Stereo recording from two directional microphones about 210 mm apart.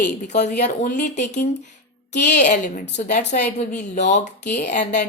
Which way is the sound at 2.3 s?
35° left (ahead or behind).